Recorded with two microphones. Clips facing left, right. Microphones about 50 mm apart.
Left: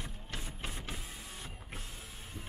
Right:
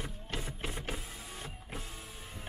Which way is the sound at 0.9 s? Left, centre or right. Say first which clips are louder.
Right 2 dB; centre.